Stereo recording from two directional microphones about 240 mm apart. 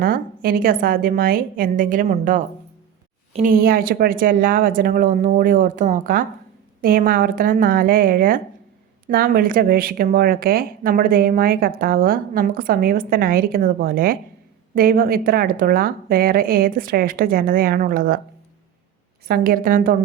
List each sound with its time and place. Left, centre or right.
0.0 s speech: right
19.3 s speech: right